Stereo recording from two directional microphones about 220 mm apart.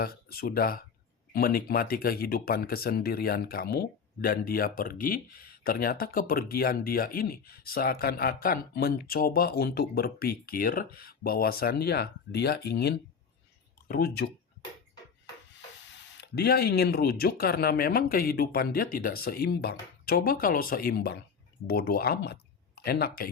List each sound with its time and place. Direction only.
0.0 s speech: 45° left (ahead or behind)
15.5 s speech: 55° left (ahead or behind)